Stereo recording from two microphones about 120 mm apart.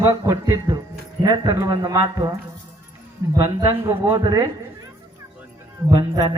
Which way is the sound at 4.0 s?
35° right (ahead or behind).